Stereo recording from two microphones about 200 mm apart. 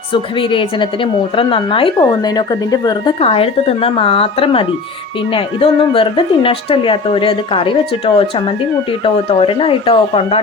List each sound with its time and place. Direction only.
0.1 s a woman's voice: 25° left (ahead or behind)